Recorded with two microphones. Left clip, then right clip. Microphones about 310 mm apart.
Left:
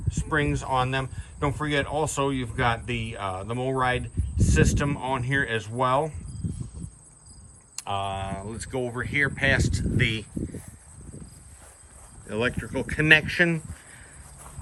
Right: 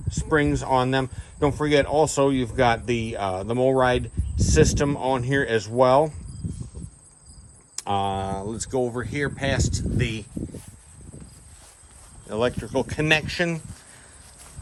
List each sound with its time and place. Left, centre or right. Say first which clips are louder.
0.1 s speech: right 4 dB; centre
7.8 s speech: right 5 dB; centre
12.3 s speech: right 3 dB; centre